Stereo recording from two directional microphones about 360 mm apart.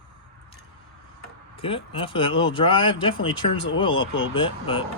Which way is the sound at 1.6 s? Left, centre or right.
Centre.